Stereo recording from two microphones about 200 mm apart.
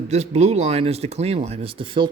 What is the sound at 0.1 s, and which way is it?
Speech, 35° right (ahead or behind).